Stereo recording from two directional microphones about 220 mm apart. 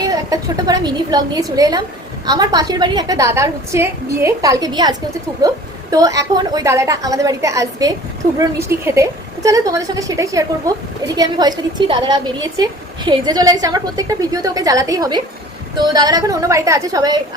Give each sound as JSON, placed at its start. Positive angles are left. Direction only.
{"t": 0.0, "sound": "a woman's voice", "side_deg": -15}